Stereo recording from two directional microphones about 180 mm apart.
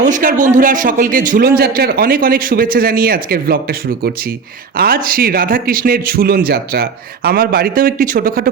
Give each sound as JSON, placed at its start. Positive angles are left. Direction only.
{"t": 0.0, "sound": "a man's voice", "side_deg": -45}